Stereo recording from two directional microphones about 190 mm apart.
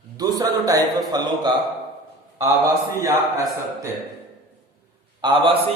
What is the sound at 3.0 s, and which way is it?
Speech, 15° right (ahead or behind).